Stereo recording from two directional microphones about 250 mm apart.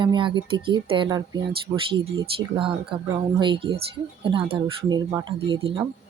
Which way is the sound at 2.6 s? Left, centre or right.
Centre.